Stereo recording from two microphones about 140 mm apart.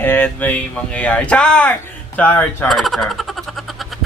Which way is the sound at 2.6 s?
Centre (ahead or behind).